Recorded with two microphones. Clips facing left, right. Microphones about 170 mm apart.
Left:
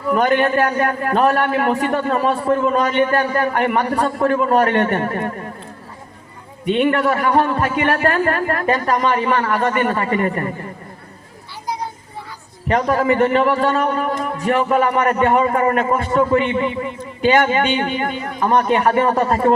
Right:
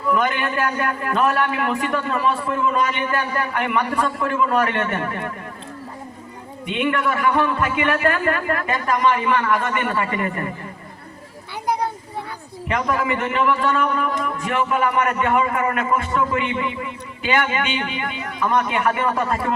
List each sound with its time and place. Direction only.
0.1 s a man's voice: 45° left (ahead or behind)
6.7 s a man's voice: 40° left (ahead or behind)
12.6 s a man's voice: 40° left (ahead or behind)